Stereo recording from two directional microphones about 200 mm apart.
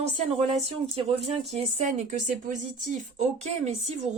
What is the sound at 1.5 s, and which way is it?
A woman's voice, 35° right (ahead or behind).